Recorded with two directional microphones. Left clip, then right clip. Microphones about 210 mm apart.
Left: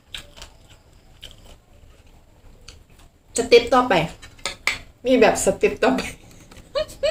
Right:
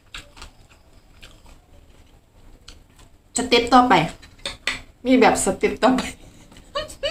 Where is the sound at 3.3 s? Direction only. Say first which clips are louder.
Left 1 dB; 20° right (ahead or behind).